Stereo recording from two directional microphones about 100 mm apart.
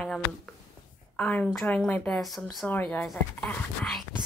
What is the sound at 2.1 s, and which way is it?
Speech, centre (ahead or behind).